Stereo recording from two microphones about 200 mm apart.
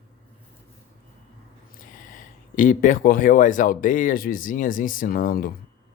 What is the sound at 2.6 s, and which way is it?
Speech, 40° left (ahead or behind).